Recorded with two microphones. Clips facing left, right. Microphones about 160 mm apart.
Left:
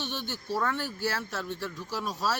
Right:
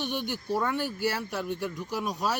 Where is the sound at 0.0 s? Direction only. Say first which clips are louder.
Right 4 dB; 15° right (ahead or behind).